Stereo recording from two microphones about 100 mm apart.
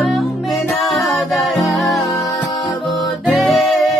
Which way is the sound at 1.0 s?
Centre (ahead or behind).